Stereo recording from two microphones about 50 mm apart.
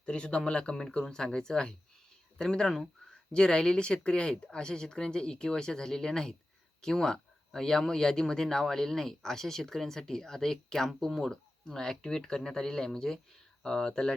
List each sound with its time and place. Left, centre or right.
0.0 s speech: left